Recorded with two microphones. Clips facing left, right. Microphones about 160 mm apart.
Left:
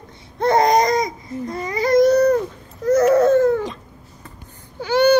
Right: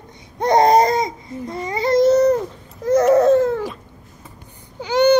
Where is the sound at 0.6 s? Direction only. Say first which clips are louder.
Right 4 dB; 30° right (ahead or behind).